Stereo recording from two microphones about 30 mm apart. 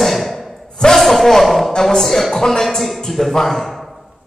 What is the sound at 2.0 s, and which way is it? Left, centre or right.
A man's voice, centre.